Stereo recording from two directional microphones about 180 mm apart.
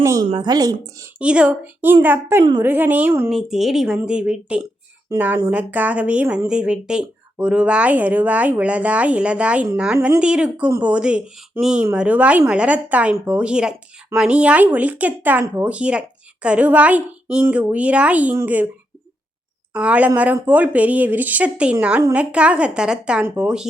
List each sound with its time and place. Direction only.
0.0 s speech: 15° right (ahead or behind)
1.2 s speech: 5° right (ahead or behind)
19.7 s speech: 5° right (ahead or behind)